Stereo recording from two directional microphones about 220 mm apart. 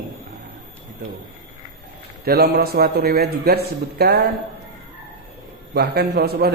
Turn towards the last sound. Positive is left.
turn(degrees=-45)  # may be behind; listen again after turning